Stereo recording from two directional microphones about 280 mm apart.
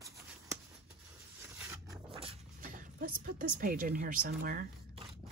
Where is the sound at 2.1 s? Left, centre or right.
Centre.